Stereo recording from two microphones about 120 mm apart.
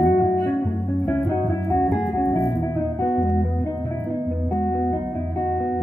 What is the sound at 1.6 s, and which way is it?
Music, centre (ahead or behind).